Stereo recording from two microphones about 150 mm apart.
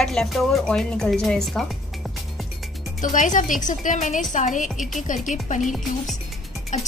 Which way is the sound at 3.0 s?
60° left (ahead or behind).